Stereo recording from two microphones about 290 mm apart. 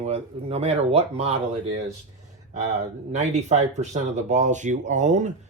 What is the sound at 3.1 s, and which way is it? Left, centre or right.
Speech, right.